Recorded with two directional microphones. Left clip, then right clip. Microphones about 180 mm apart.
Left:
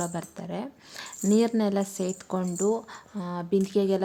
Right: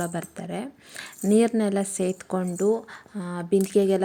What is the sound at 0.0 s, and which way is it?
A woman's voice, 10° right (ahead or behind).